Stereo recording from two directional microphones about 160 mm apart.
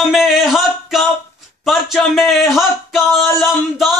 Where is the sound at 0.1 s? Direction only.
Centre (ahead or behind).